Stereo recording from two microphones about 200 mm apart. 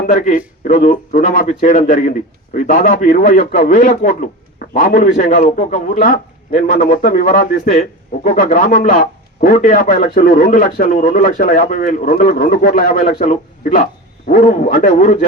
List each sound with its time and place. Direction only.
0.1 s a man's voice: 40° left (ahead or behind)